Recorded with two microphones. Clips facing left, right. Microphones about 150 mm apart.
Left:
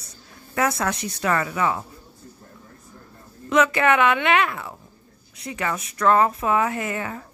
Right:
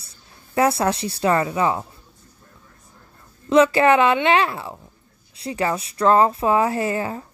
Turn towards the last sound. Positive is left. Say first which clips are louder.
# right 5 dB
turn(degrees=-30)  # may be behind; listen again after turning